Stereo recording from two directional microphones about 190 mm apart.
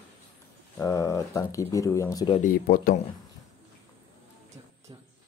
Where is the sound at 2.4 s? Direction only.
50° left (ahead or behind).